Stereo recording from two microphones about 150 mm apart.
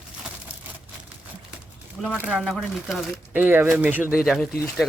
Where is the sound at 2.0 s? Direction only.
10° right (ahead or behind).